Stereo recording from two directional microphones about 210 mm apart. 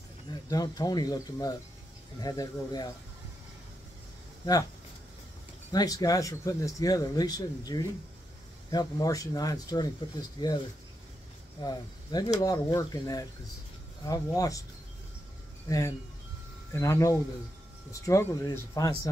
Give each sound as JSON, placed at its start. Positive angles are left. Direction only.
{"t": 0.3, "sound": "speech", "side_deg": 20}
{"t": 5.7, "sound": "speech", "side_deg": 20}
{"t": 11.6, "sound": "speech", "side_deg": 20}
{"t": 15.7, "sound": "speech", "side_deg": 15}